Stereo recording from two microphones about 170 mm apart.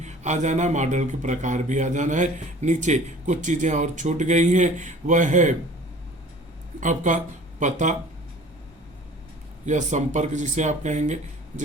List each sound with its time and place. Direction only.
0.0 s a man's voice: 45° right (ahead or behind)
6.7 s a man's voice: 50° right (ahead or behind)
9.6 s a man's voice: 45° right (ahead or behind)